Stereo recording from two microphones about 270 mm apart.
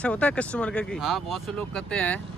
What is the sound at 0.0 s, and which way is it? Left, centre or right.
Speech, centre.